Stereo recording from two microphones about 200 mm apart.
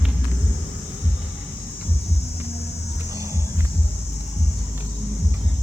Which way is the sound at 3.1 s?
15° right (ahead or behind).